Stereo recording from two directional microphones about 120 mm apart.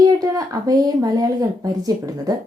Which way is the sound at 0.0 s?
30° right (ahead or behind).